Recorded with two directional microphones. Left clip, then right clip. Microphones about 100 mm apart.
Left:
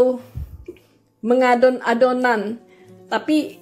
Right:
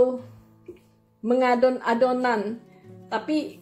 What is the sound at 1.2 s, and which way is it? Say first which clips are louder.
Speech: left 5 dB; 30° left (ahead or behind).